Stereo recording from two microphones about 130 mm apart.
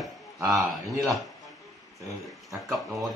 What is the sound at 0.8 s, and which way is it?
Speech, 25° right (ahead or behind).